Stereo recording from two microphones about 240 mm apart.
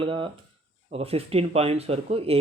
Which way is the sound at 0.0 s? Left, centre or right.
Right.